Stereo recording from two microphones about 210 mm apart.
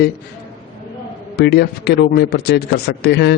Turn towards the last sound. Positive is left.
turn(degrees=55)  # may be behind; listen again after turning